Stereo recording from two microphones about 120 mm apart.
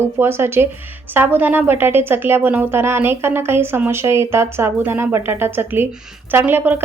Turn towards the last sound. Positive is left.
turn(degrees=-15)  # may be behind; listen again after turning